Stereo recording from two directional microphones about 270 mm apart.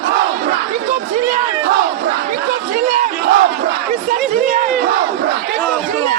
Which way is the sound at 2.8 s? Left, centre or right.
Right.